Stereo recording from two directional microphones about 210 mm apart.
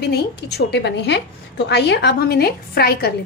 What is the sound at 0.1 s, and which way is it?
A woman's voice, 50° left (ahead or behind).